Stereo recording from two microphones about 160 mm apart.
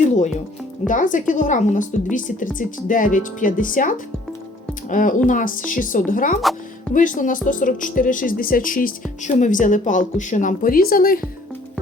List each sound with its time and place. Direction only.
0.9 s a woman's voice: 55° left (ahead or behind)